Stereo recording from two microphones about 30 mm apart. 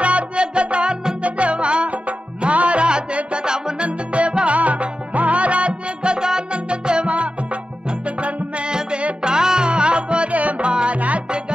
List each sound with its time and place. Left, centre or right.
0.0 s music: right
3.4 s music: right
3.8 s music: right
6.1 s music: right
6.5 s music: right
8.6 s music: right
11.0 s music: right